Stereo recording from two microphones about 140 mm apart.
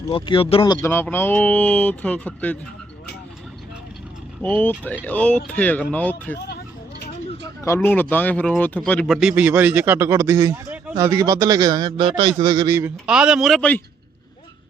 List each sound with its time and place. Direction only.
0.1 s speech: 40° left (ahead or behind)
0.8 s speech: 15° left (ahead or behind)
4.4 s speech: 15° left (ahead or behind)
7.4 s speech: 20° left (ahead or behind); by 9.1 s 5° left (ahead or behind)
9.1 s a man's voice: 10° right (ahead or behind); by 12.7 s 30° right (ahead or behind)
13.1 s speech: 5° right (ahead or behind)